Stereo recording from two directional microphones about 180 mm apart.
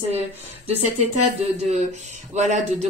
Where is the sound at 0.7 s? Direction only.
35° right (ahead or behind).